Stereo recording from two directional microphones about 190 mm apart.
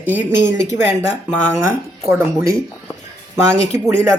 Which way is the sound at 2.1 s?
10° right (ahead or behind).